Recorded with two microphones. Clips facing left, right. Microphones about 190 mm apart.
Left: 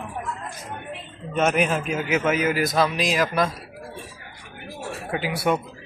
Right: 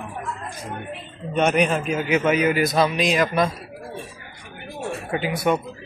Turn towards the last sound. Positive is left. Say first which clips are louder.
# right 2 dB
turn(degrees=5)  # may be behind; listen again after turning